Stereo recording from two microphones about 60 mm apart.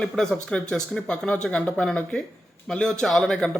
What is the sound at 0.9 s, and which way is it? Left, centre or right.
Speech, centre.